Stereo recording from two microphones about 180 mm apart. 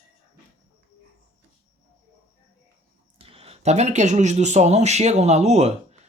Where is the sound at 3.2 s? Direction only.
30° right (ahead or behind).